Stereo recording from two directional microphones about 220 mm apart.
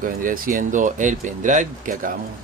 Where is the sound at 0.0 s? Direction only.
40° right (ahead or behind).